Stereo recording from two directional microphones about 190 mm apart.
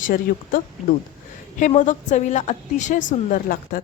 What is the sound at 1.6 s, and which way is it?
A woman's voice, 40° left (ahead or behind).